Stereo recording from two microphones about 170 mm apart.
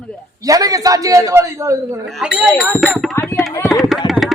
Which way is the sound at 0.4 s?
20° right (ahead or behind).